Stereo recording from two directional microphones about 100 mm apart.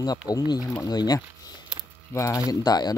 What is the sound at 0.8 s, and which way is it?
Speech, 40° left (ahead or behind).